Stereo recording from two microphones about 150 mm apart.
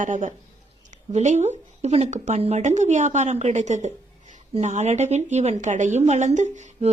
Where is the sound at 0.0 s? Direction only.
60° right (ahead or behind).